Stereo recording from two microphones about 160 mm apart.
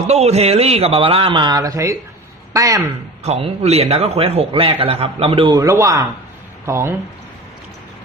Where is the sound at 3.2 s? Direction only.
40° right (ahead or behind).